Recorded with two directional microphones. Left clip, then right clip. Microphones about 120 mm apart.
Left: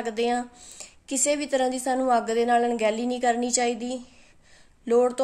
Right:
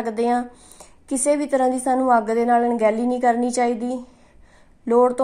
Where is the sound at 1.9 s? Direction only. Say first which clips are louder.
Right 5 dB; 20° left (ahead or behind).